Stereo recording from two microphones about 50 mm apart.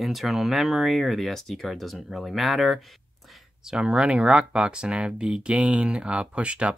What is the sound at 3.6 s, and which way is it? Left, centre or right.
Speech, centre.